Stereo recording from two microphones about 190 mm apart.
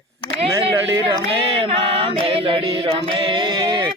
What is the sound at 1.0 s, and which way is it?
Speech, 25° right (ahead or behind).